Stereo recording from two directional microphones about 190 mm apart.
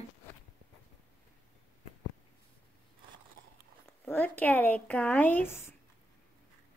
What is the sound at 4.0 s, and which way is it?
Speech, 10° left (ahead or behind).